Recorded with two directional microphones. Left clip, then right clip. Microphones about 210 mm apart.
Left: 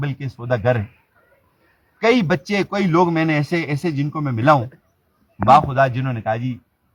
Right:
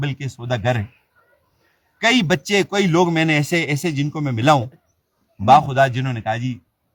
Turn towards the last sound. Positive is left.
turn(degrees=-15)  # may be behind; listen again after turning